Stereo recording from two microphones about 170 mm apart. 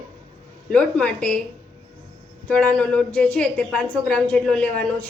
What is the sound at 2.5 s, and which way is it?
A woman's voice, 5° left (ahead or behind).